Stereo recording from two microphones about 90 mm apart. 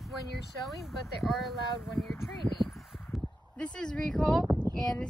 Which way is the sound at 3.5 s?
10° left (ahead or behind).